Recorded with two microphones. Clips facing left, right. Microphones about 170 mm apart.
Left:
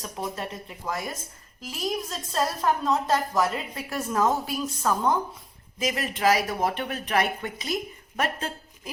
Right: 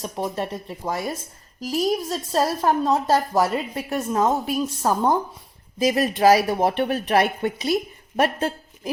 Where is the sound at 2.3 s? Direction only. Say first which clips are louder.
Right 5 dB; 30° right (ahead or behind).